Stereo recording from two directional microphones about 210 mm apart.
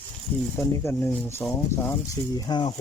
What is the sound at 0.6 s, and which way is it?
Speech, 15° left (ahead or behind).